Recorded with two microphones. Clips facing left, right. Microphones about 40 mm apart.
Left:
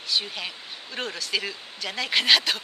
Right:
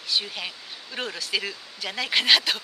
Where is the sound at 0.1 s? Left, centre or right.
Centre.